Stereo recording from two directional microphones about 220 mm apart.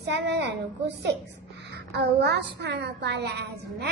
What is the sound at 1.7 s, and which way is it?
A woman's voice, 50° right (ahead or behind).